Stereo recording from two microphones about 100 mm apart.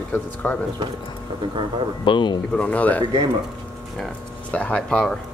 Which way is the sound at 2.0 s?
55° left (ahead or behind).